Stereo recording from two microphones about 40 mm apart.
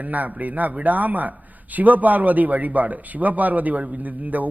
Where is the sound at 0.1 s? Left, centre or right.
Right.